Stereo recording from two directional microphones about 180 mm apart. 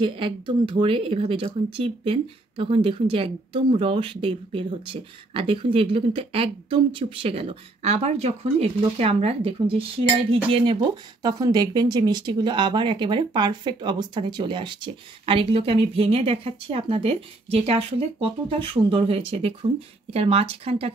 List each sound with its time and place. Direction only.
0.0 s speech: 30° right (ahead or behind)